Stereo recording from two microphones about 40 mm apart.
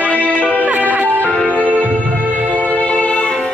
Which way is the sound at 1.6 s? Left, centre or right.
Right.